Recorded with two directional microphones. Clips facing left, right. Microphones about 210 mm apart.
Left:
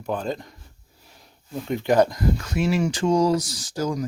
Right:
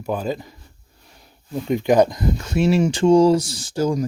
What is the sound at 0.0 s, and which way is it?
Speech, 5° right (ahead or behind).